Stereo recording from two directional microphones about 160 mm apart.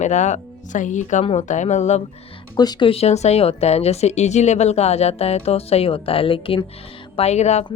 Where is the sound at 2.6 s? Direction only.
30° left (ahead or behind).